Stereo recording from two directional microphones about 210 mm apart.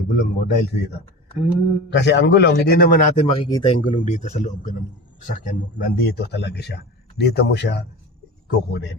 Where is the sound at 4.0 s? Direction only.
35° left (ahead or behind).